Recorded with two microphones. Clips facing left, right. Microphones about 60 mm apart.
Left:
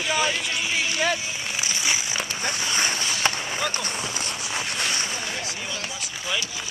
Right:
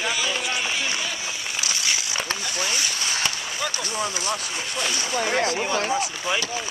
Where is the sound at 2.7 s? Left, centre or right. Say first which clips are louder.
Left 3 dB; left.